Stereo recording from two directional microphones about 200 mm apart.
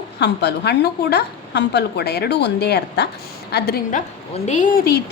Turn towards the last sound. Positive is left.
turn(degrees=50)  # may be behind; listen again after turning